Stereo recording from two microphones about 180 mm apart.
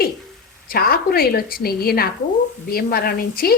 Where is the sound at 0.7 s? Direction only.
55° left (ahead or behind).